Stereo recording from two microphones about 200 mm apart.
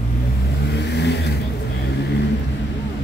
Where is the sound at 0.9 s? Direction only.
60° left (ahead or behind).